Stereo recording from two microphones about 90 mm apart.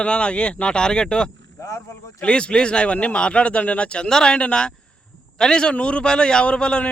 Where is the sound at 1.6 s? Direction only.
35° left (ahead or behind).